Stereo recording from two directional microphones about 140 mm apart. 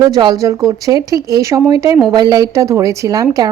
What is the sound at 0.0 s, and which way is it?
A woman's voice, 30° right (ahead or behind).